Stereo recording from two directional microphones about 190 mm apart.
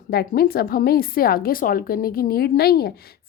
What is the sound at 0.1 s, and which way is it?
A woman's voice, 55° left (ahead or behind).